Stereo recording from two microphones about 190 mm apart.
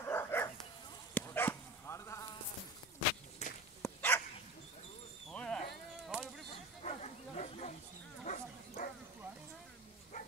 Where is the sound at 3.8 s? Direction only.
15° left (ahead or behind).